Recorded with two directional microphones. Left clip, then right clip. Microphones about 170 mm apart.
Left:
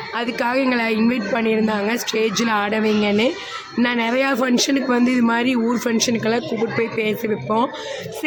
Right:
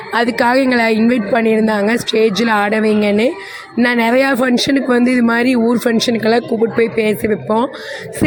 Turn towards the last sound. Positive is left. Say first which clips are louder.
# right 5 dB
turn(degrees=-25)  # may be behind; listen again after turning